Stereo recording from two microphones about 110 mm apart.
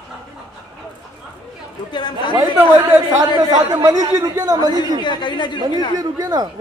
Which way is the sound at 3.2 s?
35° right (ahead or behind).